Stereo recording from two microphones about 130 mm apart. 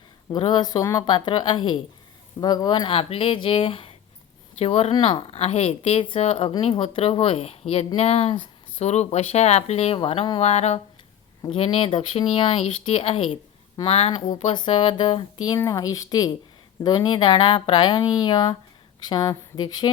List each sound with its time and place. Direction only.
0.3 s speech: 35° left (ahead or behind); by 4.9 s 50° left (ahead or behind)
4.9 s speech: 40° left (ahead or behind)
10.5 s a sound: 55° left (ahead or behind)
11.4 s speech: 50° left (ahead or behind)
14.1 s speech: 30° left (ahead or behind)
15.5 s speech: 25° left (ahead or behind)